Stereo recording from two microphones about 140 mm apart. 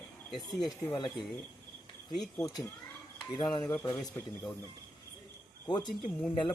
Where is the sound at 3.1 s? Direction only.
30° left (ahead or behind).